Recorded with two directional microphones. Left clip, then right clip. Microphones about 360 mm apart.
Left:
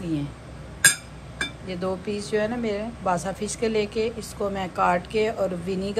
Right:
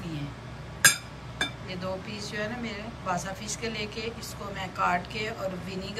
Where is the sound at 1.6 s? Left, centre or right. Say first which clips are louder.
Left 6 dB; centre.